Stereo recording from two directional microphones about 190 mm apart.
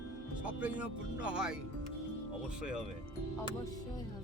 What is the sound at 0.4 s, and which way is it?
Speech, 5° right (ahead or behind).